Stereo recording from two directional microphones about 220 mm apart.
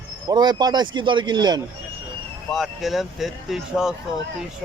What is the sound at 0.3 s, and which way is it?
Speech, 20° right (ahead or behind).